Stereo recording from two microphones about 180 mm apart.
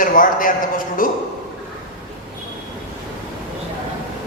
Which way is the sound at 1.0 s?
50° left (ahead or behind).